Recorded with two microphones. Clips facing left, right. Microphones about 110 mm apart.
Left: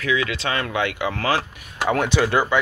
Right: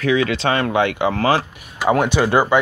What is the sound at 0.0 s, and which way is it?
Speech, 35° right (ahead or behind).